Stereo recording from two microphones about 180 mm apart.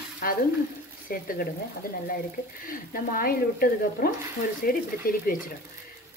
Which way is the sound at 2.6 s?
50° left (ahead or behind).